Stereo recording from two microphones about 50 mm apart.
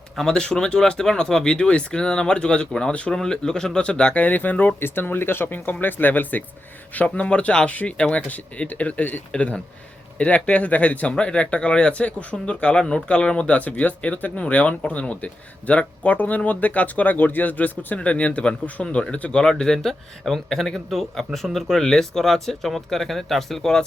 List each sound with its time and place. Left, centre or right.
0.3 s speech: centre; by 6.4 s left
7.1 s speech: left
18.0 s speech: left; by 23.8 s centre